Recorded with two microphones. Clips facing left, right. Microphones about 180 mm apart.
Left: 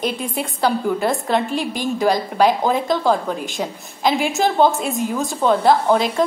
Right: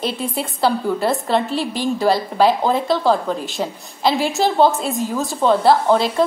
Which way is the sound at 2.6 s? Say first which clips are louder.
Right 1 dB; 5° left (ahead or behind).